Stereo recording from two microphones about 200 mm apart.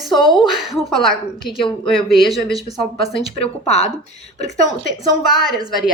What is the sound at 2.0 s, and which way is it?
Speech, centre (ahead or behind).